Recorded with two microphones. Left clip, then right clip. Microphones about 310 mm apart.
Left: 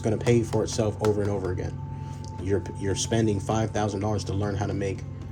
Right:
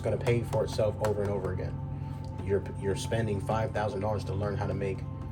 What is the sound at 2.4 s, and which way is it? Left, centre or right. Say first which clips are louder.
Speech: left 2 dB; left.